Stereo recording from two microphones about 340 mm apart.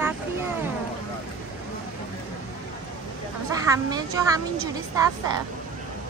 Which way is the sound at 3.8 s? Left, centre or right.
Centre.